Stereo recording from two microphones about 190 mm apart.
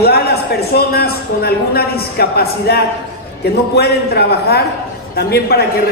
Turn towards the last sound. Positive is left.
turn(degrees=55)  # may be behind; listen again after turning